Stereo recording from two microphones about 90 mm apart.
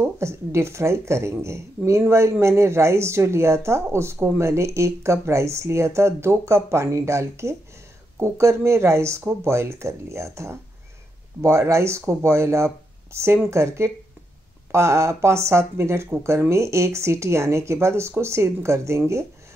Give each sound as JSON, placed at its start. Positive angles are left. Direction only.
{"t": 0.0, "sound": "speech", "side_deg": -30}